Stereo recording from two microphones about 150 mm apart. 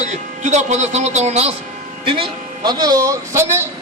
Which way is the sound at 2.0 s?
35° right (ahead or behind).